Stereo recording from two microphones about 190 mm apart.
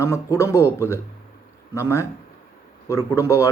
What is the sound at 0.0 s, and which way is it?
A man's voice, 15° left (ahead or behind).